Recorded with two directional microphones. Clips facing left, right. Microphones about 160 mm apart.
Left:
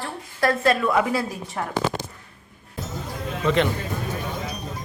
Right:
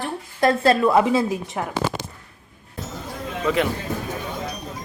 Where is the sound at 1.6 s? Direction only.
10° right (ahead or behind).